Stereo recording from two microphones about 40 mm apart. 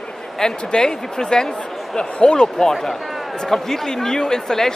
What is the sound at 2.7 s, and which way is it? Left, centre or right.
A man's voice, centre.